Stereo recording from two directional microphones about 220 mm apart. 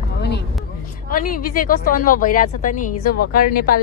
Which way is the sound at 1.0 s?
40° left (ahead or behind).